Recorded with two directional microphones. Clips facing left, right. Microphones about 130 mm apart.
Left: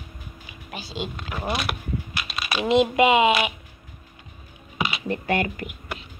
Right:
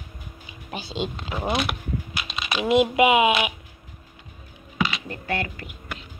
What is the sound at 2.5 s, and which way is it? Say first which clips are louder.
Speech: even; 10° right (ahead or behind).